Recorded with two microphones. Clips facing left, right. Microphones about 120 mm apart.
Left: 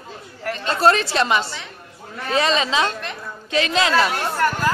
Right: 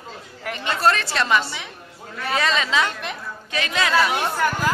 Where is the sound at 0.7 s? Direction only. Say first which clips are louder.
Left 3 dB; 20° left (ahead or behind).